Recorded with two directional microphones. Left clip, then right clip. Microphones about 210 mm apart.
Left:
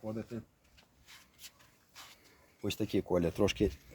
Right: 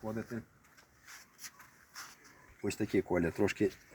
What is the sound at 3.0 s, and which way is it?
Speech, 45° left (ahead or behind).